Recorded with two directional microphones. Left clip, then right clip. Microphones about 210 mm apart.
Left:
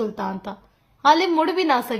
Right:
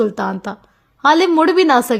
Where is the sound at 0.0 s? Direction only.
40° right (ahead or behind).